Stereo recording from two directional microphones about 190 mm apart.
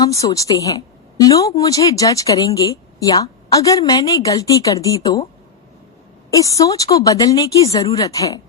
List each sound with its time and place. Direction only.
0.0 s a woman's voice: 20° left (ahead or behind)
6.3 s a woman's voice: 15° left (ahead or behind)